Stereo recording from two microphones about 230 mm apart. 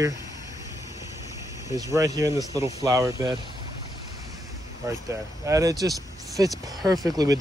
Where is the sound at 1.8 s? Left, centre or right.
Centre.